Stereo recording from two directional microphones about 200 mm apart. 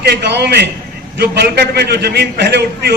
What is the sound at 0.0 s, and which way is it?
A man's voice, 55° right (ahead or behind).